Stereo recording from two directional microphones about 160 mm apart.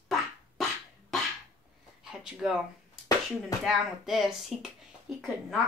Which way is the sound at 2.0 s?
5° right (ahead or behind).